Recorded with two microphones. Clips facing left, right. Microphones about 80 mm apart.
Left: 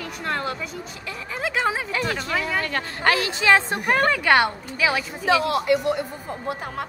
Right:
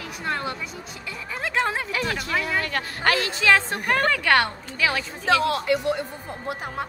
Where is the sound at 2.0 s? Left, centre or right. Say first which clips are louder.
Left 1 dB; left; by 5.7 s centre.